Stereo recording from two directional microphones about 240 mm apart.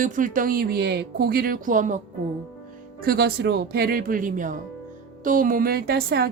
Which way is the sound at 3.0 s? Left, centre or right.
Right.